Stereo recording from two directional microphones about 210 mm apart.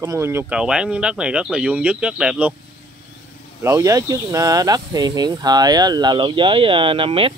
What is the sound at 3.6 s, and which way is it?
Speech, 15° right (ahead or behind).